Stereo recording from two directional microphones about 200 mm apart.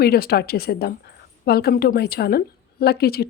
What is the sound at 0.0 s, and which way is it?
A woman's voice, 50° left (ahead or behind).